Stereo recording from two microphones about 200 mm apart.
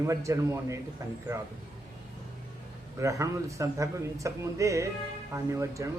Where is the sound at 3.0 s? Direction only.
15° right (ahead or behind).